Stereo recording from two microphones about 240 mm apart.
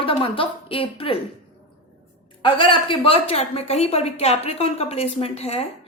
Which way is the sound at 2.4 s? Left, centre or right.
Left.